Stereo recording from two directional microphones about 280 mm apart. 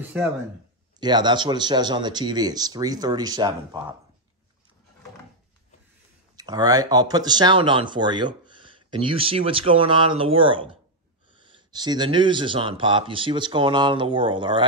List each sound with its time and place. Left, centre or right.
0.9 s speech: centre
6.3 s speech: centre